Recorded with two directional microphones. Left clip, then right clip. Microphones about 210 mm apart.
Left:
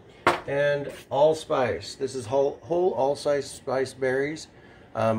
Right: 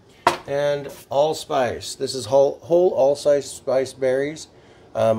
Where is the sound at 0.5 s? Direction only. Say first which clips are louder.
Right 2 dB; 50° right (ahead or behind).